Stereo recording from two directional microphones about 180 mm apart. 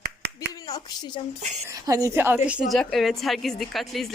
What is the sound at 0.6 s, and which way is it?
Speech, 20° left (ahead or behind).